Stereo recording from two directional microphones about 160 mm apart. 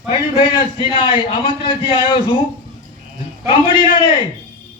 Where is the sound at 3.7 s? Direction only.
30° left (ahead or behind).